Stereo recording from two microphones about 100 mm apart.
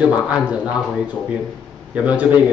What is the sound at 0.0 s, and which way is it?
Speech, 15° right (ahead or behind).